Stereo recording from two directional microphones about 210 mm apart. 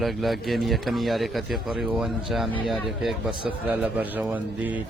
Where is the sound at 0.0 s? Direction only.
Centre (ahead or behind).